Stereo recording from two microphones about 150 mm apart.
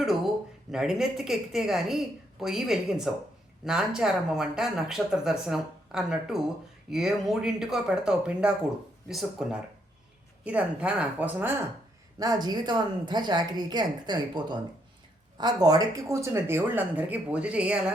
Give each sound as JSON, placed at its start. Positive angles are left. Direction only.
{"t": 0.7, "sound": "speech", "side_deg": -5}
{"t": 12.2, "sound": "a woman's voice", "side_deg": -25}